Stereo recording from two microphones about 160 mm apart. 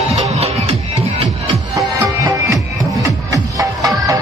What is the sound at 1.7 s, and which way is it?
Music, 20° right (ahead or behind).